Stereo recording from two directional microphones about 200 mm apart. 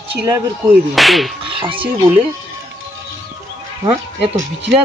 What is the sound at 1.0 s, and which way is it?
Speech, centre (ahead or behind).